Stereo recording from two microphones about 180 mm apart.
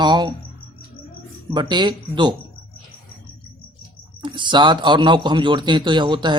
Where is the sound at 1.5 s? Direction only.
25° right (ahead or behind).